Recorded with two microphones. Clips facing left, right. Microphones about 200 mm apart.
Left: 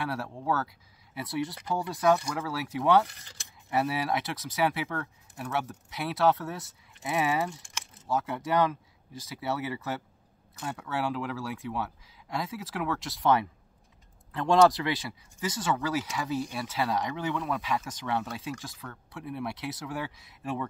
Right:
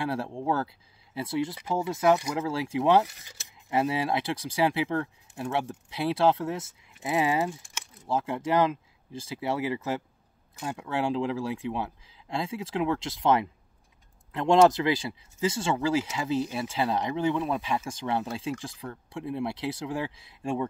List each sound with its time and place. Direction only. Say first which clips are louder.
0.0 s speech: right 3 dB; 25° right (ahead or behind)
3.1 s speech: right 1 dB; 10° right (ahead or behind)
3.7 s speech: right 2 dB; 25° right (ahead or behind)